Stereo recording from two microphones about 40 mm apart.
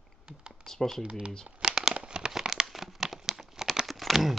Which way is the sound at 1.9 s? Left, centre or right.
Right.